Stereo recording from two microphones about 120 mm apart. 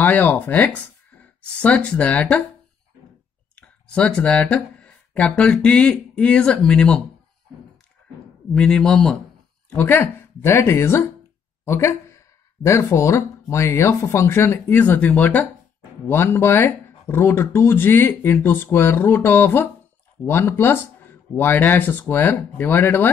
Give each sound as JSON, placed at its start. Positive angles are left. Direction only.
{"t": 0.0, "sound": "speech", "side_deg": 15}
{"t": 3.5, "sound": "speech", "side_deg": 10}
{"t": 8.5, "sound": "speech", "side_deg": 5}